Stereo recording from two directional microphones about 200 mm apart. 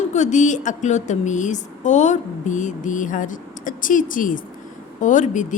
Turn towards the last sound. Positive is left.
turn(degrees=40)  # may be behind; listen again after turning